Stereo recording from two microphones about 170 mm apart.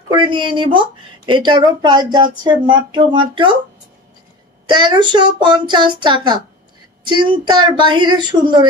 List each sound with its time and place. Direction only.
0.1 s a woman's voice: 25° right (ahead or behind)
4.6 s a woman's voice: 25° right (ahead or behind)